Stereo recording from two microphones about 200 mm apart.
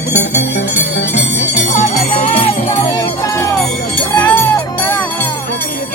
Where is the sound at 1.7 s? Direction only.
40° left (ahead or behind).